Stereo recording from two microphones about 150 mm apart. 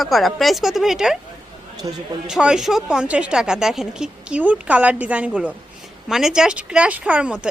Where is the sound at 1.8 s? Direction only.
30° right (ahead or behind).